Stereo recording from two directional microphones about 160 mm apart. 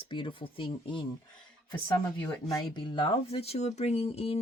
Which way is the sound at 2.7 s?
30° left (ahead or behind).